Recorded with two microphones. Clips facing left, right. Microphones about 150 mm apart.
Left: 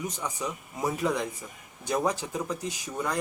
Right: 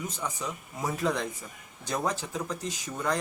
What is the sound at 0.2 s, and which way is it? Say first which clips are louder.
A man's voice: left 1 dB; 15° left (ahead or behind).